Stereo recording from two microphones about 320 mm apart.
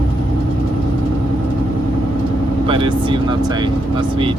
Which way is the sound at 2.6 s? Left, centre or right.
Centre.